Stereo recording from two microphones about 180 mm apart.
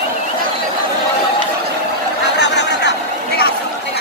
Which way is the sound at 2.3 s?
75° left (ahead or behind).